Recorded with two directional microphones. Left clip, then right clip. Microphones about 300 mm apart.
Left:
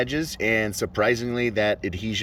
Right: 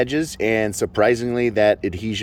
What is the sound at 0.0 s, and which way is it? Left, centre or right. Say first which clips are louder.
Speech: right 4 dB; centre.